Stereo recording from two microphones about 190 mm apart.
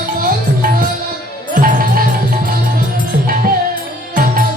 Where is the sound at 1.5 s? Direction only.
50° right (ahead or behind).